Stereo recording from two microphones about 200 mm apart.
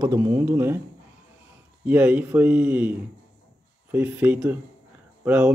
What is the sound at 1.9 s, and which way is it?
Speech, 10° right (ahead or behind).